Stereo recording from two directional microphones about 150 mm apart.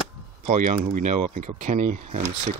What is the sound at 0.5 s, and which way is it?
Speech, 55° right (ahead or behind).